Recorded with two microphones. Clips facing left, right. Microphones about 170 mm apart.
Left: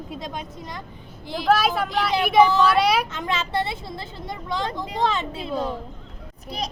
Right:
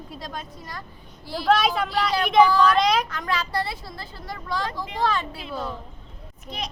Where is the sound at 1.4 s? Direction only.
5° left (ahead or behind).